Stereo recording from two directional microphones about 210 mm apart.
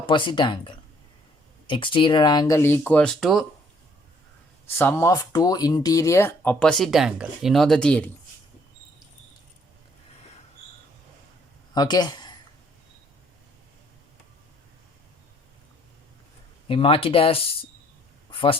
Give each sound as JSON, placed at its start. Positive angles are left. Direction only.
{"t": 0.0, "sound": "speech", "side_deg": 20}
{"t": 4.6, "sound": "speech", "side_deg": 10}
{"t": 11.7, "sound": "speech", "side_deg": 20}
{"t": 16.6, "sound": "speech", "side_deg": 25}
{"t": 18.3, "sound": "a sound", "side_deg": 25}